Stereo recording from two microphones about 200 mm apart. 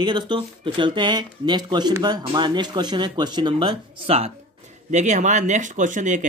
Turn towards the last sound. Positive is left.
turn(degrees=-40)  # may be behind; listen again after turning